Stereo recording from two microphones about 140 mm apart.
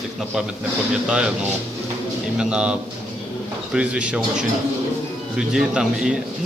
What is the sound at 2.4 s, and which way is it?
Speech, 5° right (ahead or behind).